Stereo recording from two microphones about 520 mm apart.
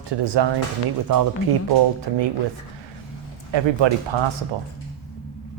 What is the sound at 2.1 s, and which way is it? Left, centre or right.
Speech, right.